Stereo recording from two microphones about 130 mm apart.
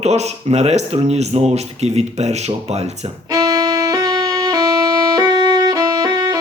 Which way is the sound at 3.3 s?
30° right (ahead or behind).